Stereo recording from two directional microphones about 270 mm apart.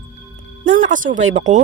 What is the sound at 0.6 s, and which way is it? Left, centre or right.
Speech, right.